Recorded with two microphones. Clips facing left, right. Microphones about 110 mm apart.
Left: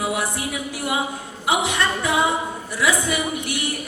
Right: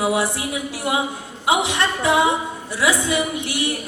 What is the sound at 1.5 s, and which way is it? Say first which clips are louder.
Speech: right 2 dB; 25° right (ahead or behind).